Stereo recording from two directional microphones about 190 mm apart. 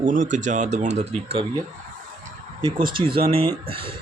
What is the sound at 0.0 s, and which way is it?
Speech, 40° right (ahead or behind).